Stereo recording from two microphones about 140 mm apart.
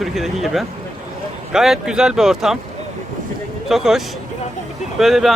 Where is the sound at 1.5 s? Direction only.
5° right (ahead or behind).